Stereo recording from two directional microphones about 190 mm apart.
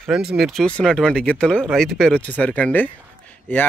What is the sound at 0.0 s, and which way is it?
Speech, centre (ahead or behind).